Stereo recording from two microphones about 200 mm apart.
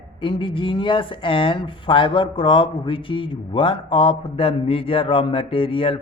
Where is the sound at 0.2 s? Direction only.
25° left (ahead or behind).